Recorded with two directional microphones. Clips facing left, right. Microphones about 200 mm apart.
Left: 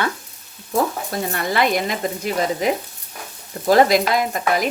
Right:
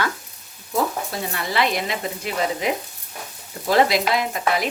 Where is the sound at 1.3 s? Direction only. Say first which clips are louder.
Left 3 dB; 50° left (ahead or behind).